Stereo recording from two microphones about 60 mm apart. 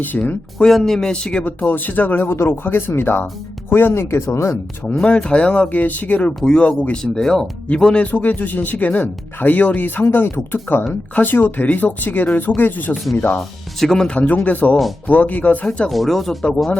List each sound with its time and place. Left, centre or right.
0.1 s speech: left
0.6 s speech: centre
1.5 s speech: left
2.3 s speech: left
4.9 s speech: centre
6.4 s speech: centre
7.0 s speech: centre
8.0 s speech: left
13.7 s speech: centre
14.1 s speech: left
15.9 s speech: centre